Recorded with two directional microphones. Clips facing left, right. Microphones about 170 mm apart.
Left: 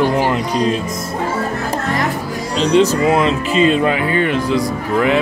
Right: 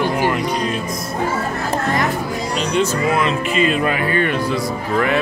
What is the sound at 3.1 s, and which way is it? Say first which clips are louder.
Speech: left 3 dB; 30° left (ahead or behind).